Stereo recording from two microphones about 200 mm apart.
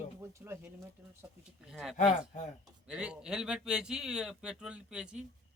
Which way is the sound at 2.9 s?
5° right (ahead or behind).